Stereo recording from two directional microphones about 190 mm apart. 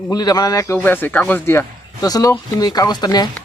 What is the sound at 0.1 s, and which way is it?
Speech, 20° left (ahead or behind).